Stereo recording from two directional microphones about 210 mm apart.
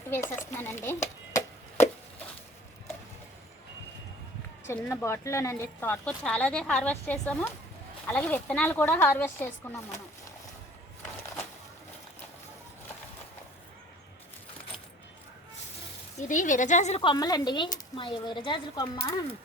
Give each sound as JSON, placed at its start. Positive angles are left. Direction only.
{"t": 0.1, "sound": "speech", "side_deg": 10}
{"t": 1.3, "sound": "chop", "side_deg": 15}
{"t": 4.6, "sound": "speech", "side_deg": 10}
{"t": 16.1, "sound": "speech", "side_deg": 40}